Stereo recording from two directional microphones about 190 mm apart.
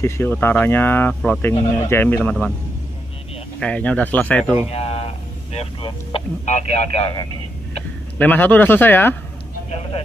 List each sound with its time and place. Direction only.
0.0 s speech: 10° left (ahead or behind)
3.5 s speech: 5° left (ahead or behind)
4.6 s speech: 30° left (ahead or behind)
8.2 s speech: 10° left (ahead or behind)
9.7 s vehicle: 35° left (ahead or behind)